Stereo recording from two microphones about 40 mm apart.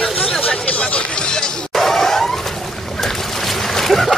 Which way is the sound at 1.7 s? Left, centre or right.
Centre.